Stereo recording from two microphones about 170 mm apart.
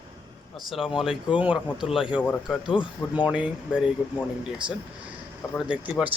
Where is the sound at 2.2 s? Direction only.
5° left (ahead or behind).